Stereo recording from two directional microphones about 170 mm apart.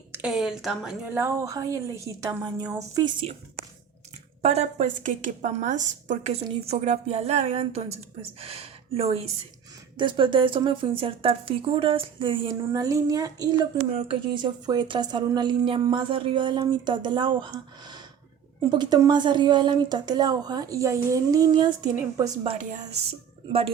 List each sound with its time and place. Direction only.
0.1 s a woman's voice: 5° right (ahead or behind); by 3.1 s 20° right (ahead or behind)
4.4 s speech: 40° right (ahead or behind); by 13.5 s 20° right (ahead or behind)
13.7 s speech: 35° right (ahead or behind)
18.7 s speech: 25° right (ahead or behind)
22.4 s speech: 45° right (ahead or behind)
23.5 s speech: 35° right (ahead or behind)